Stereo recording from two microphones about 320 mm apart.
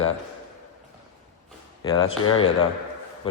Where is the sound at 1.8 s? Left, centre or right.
Centre.